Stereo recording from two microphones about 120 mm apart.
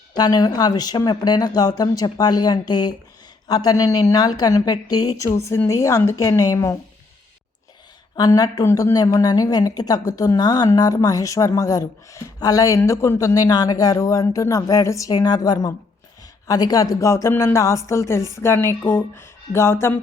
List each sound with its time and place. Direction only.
0.2 s a woman's voice: 35° left (ahead or behind)
8.1 s a woman's voice: 30° left (ahead or behind)